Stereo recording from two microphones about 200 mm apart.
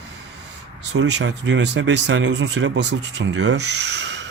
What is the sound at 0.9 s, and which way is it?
Speech, 60° right (ahead or behind).